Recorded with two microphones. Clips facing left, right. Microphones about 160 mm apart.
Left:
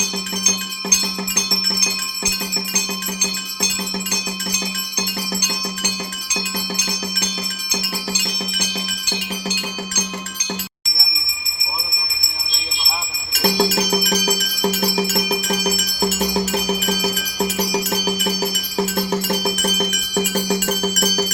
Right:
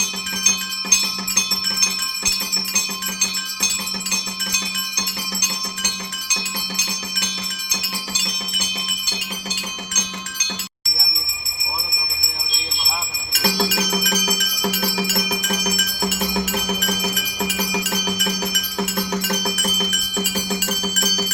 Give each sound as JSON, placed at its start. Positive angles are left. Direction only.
{"t": 13.4, "sound": "cowbell", "side_deg": 45}
{"t": 19.6, "sound": "bell", "side_deg": 40}